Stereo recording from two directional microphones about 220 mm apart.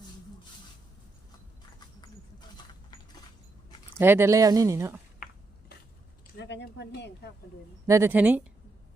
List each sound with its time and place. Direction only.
1.8 s a sound: 20° left (ahead or behind)
3.9 s speech: 10° right (ahead or behind)
6.3 s speech: 50° left (ahead or behind)
7.9 s speech: 10° right (ahead or behind)